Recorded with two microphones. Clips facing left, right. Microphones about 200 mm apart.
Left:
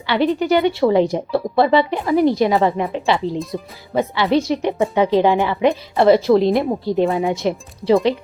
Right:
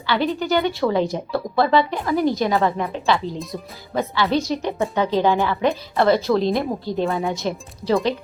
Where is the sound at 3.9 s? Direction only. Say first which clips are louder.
Left 4 dB; 25° left (ahead or behind).